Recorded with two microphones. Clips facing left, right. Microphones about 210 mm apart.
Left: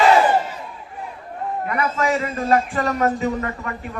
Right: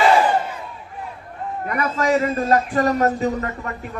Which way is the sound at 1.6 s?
40° right (ahead or behind).